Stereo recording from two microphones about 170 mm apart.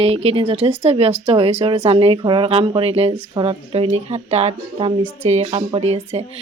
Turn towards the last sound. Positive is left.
turn(degrees=-35)  # may be behind; listen again after turning